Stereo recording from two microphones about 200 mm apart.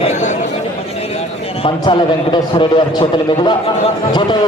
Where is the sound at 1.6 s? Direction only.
25° left (ahead or behind).